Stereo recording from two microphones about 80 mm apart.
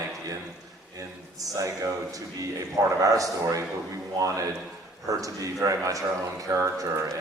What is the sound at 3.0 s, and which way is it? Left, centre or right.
Speech, right.